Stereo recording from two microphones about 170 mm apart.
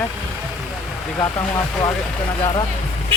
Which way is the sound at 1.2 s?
20° left (ahead or behind).